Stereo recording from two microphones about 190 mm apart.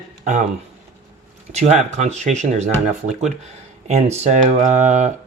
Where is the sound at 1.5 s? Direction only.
35° right (ahead or behind).